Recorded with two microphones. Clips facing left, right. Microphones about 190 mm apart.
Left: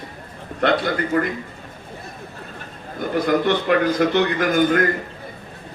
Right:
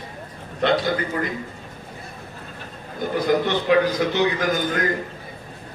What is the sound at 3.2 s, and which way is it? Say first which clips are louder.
A man's voice: left 1 dB; 55° left (ahead or behind).